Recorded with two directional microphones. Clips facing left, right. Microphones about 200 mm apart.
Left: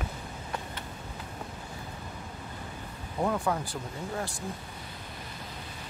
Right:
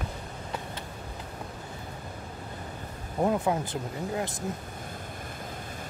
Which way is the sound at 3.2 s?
20° right (ahead or behind).